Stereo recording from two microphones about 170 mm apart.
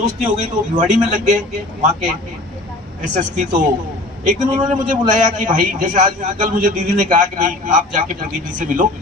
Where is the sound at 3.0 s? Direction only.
45° right (ahead or behind).